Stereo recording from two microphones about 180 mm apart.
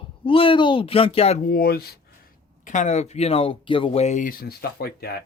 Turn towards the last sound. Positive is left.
turn(degrees=60)  # may be behind; listen again after turning